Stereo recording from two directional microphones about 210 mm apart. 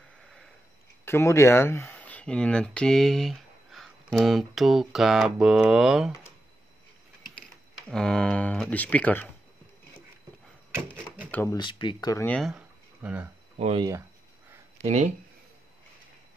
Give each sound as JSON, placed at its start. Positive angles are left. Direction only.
{"t": 1.0, "sound": "speech", "side_deg": 15}
{"t": 7.3, "sound": "speech", "side_deg": 5}
{"t": 11.3, "sound": "speech", "side_deg": 15}
{"t": 13.6, "sound": "speech", "side_deg": -30}